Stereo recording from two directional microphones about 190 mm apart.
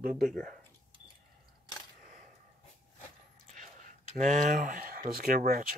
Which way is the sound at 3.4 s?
40° right (ahead or behind).